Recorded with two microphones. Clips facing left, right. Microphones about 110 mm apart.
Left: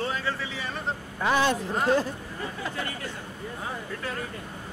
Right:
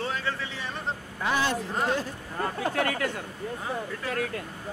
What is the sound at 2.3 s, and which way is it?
Speech, 60° right (ahead or behind).